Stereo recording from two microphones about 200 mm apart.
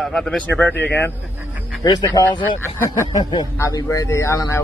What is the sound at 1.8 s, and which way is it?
Speech, 20° left (ahead or behind).